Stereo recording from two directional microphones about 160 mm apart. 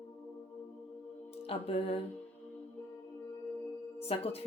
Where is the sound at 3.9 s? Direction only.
40° left (ahead or behind).